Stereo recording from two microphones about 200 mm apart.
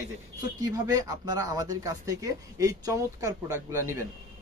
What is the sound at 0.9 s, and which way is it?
Speech, 20° right (ahead or behind).